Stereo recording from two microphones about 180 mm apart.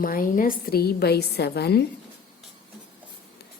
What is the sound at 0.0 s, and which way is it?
A woman's voice, 50° left (ahead or behind).